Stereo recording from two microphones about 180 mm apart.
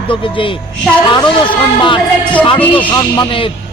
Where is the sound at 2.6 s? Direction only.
10° left (ahead or behind).